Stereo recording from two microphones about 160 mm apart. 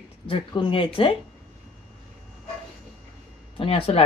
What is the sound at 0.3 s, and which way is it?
Speech, 30° left (ahead or behind).